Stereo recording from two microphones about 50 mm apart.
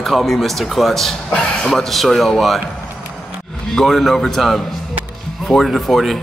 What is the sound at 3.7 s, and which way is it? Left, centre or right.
Speech, centre.